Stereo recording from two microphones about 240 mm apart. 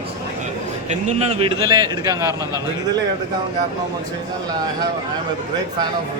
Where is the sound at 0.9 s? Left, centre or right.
Right.